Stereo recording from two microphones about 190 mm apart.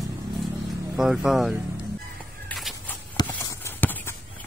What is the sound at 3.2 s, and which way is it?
Clip-clop, 20° left (ahead or behind).